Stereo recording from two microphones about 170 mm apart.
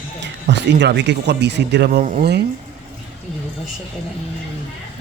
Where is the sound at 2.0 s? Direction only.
50° right (ahead or behind).